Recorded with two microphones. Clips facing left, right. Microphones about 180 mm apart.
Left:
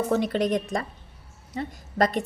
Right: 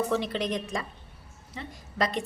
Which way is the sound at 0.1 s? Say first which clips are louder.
Left 5 dB; 45° left (ahead or behind).